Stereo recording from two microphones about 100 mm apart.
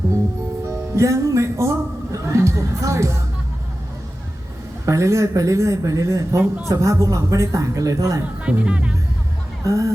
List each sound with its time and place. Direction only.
0.7 s music: 30° right (ahead or behind)
4.9 s a man's voice: 30° right (ahead or behind)
8.4 s speech: 10° right (ahead or behind)
9.6 s a man's voice: 30° right (ahead or behind)